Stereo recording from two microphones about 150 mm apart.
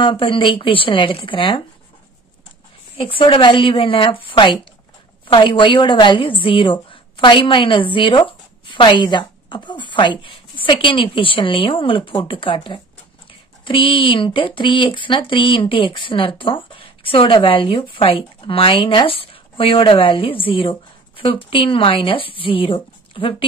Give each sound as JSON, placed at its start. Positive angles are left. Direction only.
{"t": 0.0, "sound": "a woman's voice", "side_deg": 35}
{"t": 3.0, "sound": "a woman's voice", "side_deg": 35}